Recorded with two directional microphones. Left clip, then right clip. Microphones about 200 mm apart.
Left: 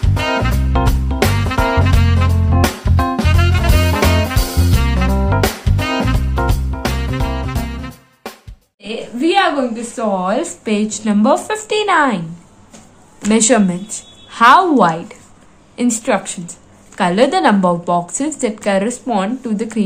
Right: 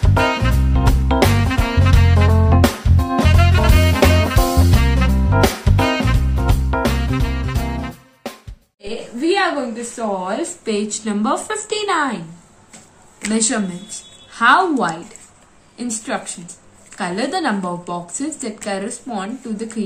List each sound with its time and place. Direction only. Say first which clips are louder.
0.0 s music: even; centre (ahead or behind)
9.2 s a sound: left 4 dB; 50° left (ahead or behind)
9.9 s a woman's voice: left 5 dB; 50° left (ahead or behind)
13.3 s a woman's voice: left 8 dB; 50° left (ahead or behind)